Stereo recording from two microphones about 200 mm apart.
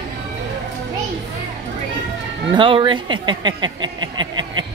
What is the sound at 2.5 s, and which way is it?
Speech, 25° right (ahead or behind).